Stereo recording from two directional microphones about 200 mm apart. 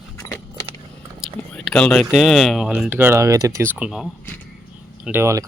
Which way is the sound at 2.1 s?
Centre (ahead or behind).